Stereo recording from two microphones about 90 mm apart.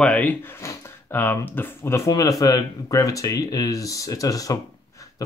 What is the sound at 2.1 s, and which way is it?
Speech, 40° left (ahead or behind).